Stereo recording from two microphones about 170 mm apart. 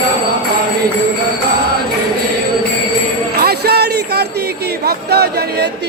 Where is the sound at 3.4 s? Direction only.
70° right (ahead or behind).